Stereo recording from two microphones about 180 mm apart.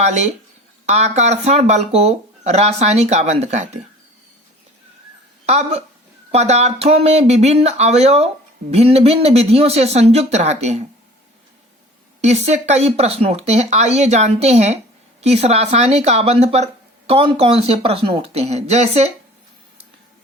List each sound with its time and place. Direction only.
0.0 s speech: 40° right (ahead or behind)
5.5 s speech: 35° right (ahead or behind)
12.2 s speech: 40° right (ahead or behind)